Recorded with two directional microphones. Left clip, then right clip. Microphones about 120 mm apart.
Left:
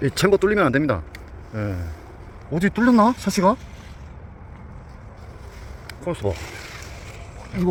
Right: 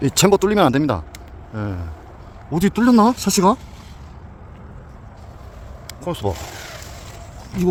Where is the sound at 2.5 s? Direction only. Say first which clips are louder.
Right 2 dB; 40° right (ahead or behind).